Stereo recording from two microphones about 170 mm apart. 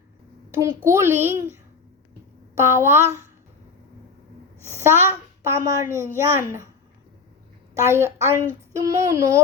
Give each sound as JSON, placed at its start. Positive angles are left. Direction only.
{"t": 0.5, "sound": "a child's voice", "side_deg": -20}
{"t": 2.6, "sound": "a child's voice", "side_deg": -15}
{"t": 4.6, "sound": "a woman's voice", "side_deg": -15}
{"t": 7.9, "sound": "a child's voice", "side_deg": -15}
{"t": 8.7, "sound": "child singing", "side_deg": -20}